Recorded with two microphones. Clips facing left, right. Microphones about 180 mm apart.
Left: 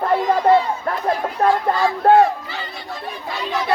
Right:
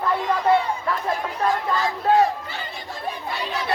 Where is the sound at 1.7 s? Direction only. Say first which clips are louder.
Left 6 dB; 55° left (ahead or behind).